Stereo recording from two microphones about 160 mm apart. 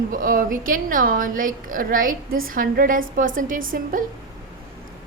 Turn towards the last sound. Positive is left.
turn(degrees=-55)  # may be behind; listen again after turning